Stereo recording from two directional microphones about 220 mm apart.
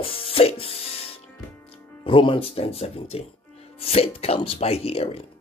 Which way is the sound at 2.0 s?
25° left (ahead or behind).